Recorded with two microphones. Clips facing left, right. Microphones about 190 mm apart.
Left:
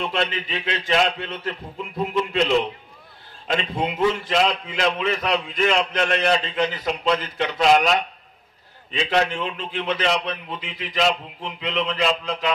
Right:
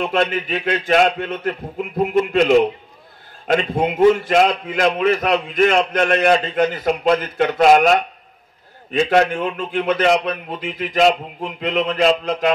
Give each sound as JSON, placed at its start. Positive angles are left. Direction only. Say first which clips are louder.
{"t": 0.0, "sound": "a man's voice", "louder": "right 6 dB", "side_deg": -50}